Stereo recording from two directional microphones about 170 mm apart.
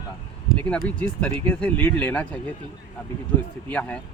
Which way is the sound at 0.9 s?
10° left (ahead or behind).